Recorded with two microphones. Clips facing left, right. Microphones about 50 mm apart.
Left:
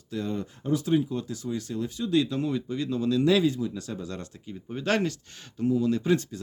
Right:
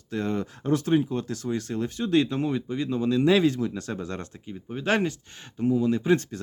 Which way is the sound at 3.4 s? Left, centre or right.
Right.